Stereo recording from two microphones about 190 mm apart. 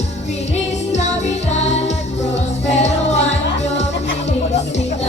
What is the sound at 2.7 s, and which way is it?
Music, 35° left (ahead or behind).